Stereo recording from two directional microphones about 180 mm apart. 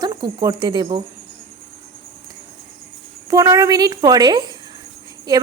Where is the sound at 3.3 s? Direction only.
20° right (ahead or behind).